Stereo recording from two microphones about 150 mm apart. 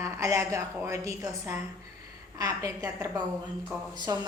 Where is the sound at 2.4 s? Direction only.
20° right (ahead or behind).